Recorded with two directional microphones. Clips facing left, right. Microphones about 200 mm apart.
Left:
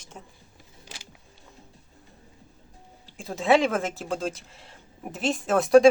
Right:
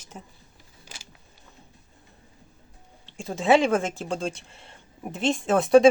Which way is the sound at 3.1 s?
Centre (ahead or behind).